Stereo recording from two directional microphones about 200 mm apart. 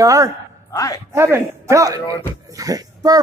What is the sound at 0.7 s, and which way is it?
Speech, 15° left (ahead or behind).